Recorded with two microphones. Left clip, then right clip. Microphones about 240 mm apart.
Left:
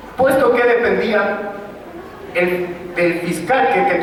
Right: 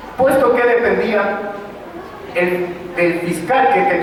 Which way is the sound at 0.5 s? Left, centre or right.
Centre.